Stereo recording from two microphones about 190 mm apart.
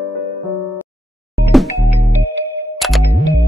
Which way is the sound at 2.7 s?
Centre (ahead or behind).